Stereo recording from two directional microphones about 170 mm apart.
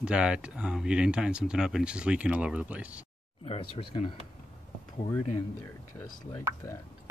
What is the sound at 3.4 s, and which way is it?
Speech, 35° left (ahead or behind).